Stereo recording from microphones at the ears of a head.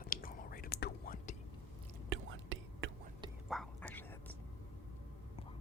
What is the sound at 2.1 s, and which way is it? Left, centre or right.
Whispering, right.